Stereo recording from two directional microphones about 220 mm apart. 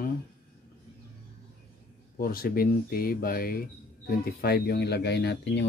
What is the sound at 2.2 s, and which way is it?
Speech, 40° left (ahead or behind).